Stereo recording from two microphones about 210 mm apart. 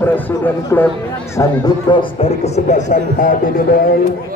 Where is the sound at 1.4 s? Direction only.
20° left (ahead or behind); by 3.6 s 40° left (ahead or behind).